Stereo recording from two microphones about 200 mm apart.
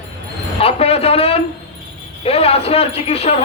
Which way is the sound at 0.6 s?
30° left (ahead or behind).